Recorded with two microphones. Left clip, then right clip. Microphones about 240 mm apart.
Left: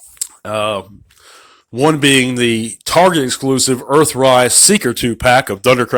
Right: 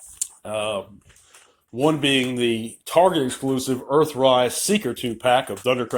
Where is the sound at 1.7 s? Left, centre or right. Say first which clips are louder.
Left 8 dB; left.